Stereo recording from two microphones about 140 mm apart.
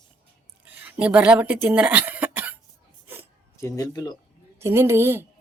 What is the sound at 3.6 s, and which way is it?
Speech, 25° left (ahead or behind).